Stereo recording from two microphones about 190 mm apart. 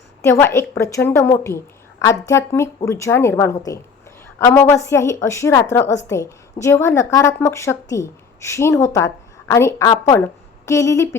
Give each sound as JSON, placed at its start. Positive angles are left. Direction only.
{"t": 0.2, "sound": "a woman's voice", "side_deg": 10}